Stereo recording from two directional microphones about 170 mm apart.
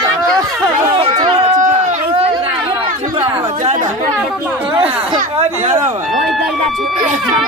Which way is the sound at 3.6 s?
40° right (ahead or behind).